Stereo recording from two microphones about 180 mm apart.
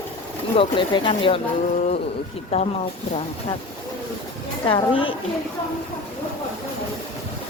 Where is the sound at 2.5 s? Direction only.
35° left (ahead or behind).